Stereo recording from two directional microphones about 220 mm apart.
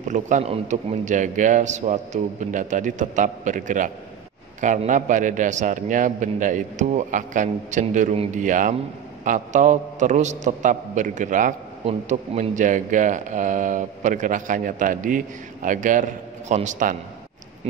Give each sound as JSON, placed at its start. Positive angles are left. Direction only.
{"t": 0.1, "sound": "a man's voice", "side_deg": -30}